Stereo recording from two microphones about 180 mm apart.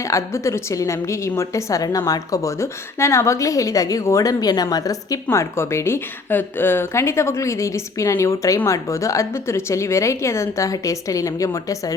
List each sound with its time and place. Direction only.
0.0 s a woman's voice: 15° left (ahead or behind)